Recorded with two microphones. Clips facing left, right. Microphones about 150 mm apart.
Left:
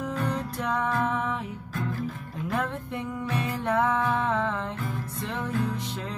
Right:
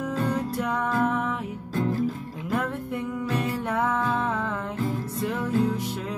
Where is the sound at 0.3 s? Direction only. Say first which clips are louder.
Right 3 dB; 10° right (ahead or behind).